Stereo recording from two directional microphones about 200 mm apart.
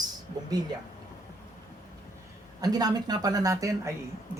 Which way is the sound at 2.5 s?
20° right (ahead or behind).